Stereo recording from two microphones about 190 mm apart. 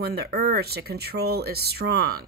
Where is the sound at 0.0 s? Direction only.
55° right (ahead or behind).